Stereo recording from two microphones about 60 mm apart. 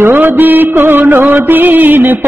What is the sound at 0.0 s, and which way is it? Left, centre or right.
Music, right.